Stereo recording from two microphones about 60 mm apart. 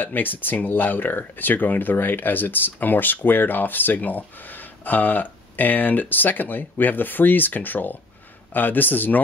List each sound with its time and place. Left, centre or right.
0.0 s speech: left